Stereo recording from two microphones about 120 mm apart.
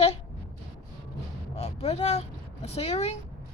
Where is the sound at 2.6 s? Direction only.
60° left (ahead or behind).